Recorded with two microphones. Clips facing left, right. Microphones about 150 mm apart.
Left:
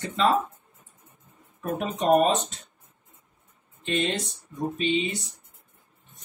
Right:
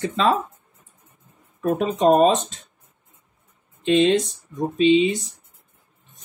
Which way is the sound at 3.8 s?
90° right.